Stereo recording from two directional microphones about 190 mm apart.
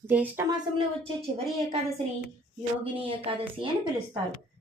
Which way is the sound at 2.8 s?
30° right (ahead or behind).